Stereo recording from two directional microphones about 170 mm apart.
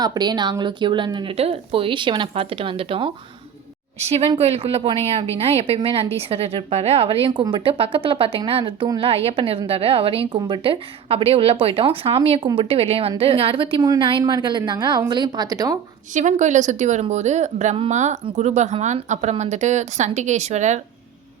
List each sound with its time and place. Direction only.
0.0 s a woman's voice: 25° right (ahead or behind)
16.1 s speech: 45° right (ahead or behind)